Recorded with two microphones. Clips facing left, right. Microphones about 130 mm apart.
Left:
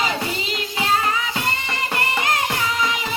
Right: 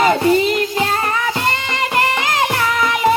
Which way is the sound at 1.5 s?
90° right.